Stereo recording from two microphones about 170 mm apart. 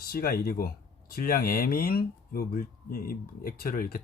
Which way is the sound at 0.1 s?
60° left (ahead or behind).